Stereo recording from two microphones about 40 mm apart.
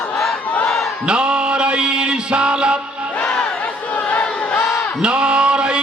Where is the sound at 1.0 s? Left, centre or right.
Right.